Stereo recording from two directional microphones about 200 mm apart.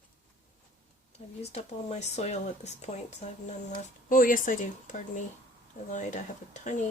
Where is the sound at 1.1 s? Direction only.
35° left (ahead or behind).